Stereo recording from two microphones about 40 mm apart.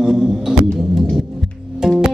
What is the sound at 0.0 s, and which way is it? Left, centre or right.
Music, centre.